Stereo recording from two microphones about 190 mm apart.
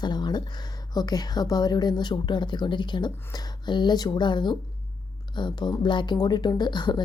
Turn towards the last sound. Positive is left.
turn(degrees=25)  # may be behind; listen again after turning